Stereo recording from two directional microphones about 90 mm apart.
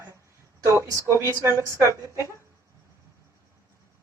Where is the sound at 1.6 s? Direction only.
35° right (ahead or behind).